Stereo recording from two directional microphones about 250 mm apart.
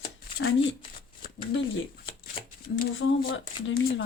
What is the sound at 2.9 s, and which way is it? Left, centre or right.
Speech, left.